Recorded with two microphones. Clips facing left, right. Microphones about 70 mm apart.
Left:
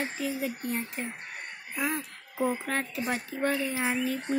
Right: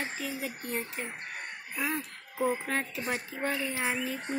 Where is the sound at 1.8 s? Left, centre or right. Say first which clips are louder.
Left 2 dB; centre.